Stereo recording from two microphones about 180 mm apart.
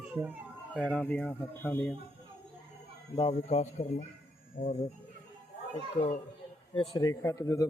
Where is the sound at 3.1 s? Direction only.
30° left (ahead or behind); by 4.7 s 45° left (ahead or behind).